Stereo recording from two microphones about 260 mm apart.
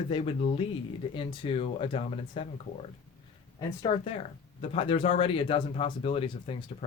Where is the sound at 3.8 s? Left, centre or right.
Left.